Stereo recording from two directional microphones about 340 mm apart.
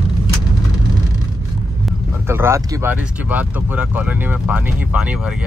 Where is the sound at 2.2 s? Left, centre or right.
Centre.